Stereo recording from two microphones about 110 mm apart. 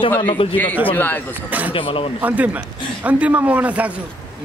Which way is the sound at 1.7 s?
55° left (ahead or behind).